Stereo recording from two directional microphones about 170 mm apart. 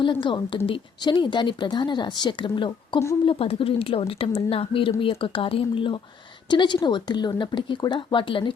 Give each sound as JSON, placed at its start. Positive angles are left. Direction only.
{"t": 0.0, "sound": "a woman's voice", "side_deg": 30}